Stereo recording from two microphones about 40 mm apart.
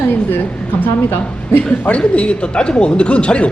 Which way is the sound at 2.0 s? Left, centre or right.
Left.